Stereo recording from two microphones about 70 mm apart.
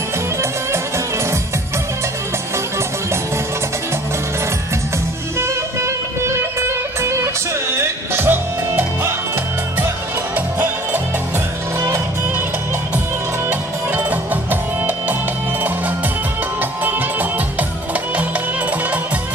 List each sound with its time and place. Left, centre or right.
0.4 s music: right
5.4 s music: right
10.3 s music: right
13.5 s music: right
16.8 s music: right